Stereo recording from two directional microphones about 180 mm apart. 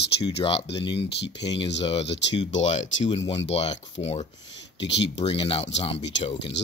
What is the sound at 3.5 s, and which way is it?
Speech, 35° left (ahead or behind).